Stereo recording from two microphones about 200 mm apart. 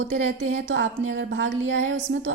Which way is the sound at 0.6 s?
75° right (ahead or behind).